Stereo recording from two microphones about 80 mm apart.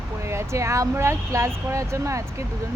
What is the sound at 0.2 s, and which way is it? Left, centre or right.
Speech, right.